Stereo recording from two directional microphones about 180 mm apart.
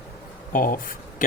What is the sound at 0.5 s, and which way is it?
Speech, 50° left (ahead or behind).